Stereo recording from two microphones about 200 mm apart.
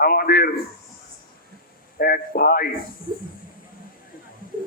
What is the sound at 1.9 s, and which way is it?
Speech, 50° left (ahead or behind).